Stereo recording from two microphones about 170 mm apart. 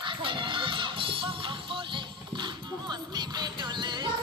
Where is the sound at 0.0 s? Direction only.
30° right (ahead or behind).